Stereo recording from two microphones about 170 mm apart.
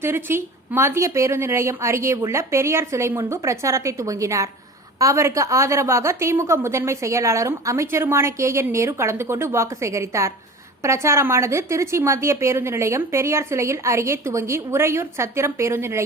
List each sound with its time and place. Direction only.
0.0 s a woman's voice: 15° right (ahead or behind)